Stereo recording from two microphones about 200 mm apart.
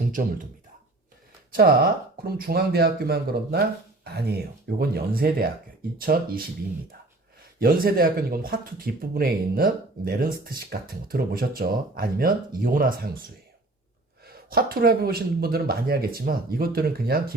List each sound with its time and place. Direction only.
0.1 s speech: 45° right (ahead or behind)
1.5 s speech: 50° right (ahead or behind)
7.6 s speech: 45° right (ahead or behind)
14.3 s speech: 50° right (ahead or behind)